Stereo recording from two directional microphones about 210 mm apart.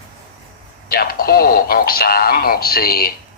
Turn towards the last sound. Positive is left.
turn(degrees=45)  # may be behind; listen again after turning